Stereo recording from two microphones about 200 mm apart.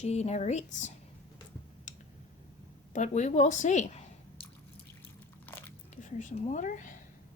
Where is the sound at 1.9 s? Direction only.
40° left (ahead or behind).